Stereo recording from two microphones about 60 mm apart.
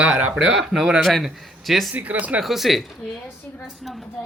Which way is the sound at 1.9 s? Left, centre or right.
Right.